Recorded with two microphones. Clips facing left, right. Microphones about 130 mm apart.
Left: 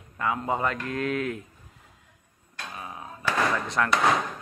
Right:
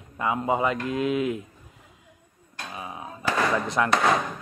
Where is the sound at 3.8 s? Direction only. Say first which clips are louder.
Right 1 dB; 15° right (ahead or behind).